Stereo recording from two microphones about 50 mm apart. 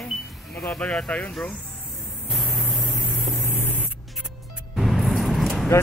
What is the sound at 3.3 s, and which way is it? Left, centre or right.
Spray, left.